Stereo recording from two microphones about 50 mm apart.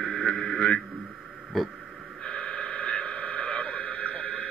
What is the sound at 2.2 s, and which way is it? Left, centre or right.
Radio, left.